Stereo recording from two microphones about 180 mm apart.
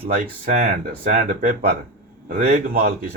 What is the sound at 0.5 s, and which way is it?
Speech, 50° right (ahead or behind).